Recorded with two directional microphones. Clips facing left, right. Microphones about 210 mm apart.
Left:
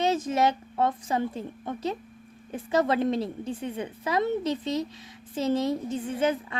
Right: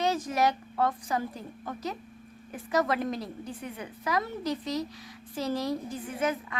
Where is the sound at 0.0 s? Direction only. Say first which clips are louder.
Left 3 dB; 25° left (ahead or behind).